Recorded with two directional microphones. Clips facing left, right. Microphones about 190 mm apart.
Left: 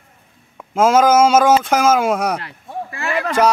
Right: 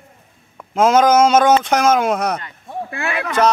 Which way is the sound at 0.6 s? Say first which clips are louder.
Even; 5° left (ahead or behind).